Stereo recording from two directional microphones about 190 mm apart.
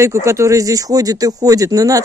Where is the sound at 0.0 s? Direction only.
15° right (ahead or behind).